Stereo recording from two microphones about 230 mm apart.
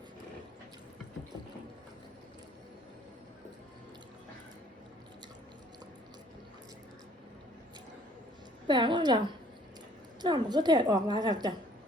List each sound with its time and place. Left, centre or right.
8.6 s a woman's voice: centre